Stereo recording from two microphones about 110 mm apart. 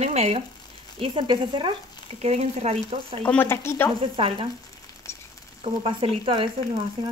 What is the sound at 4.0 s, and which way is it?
Speech, 55° right (ahead or behind).